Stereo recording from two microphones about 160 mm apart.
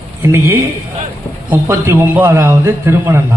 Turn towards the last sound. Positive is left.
turn(degrees=-15)  # may be behind; listen again after turning